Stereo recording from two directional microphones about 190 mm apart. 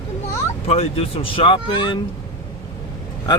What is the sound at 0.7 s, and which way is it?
Speech, 30° left (ahead or behind).